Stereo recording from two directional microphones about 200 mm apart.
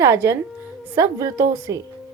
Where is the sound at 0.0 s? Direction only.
15° right (ahead or behind).